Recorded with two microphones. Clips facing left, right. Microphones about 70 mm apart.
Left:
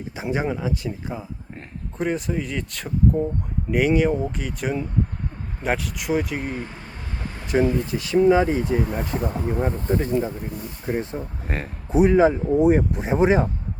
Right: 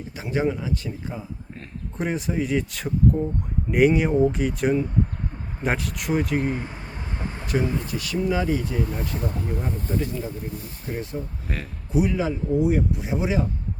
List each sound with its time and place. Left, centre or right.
0.2 s speech: centre
2.0 s speech: centre
7.4 s speech: left
9.6 s speech: left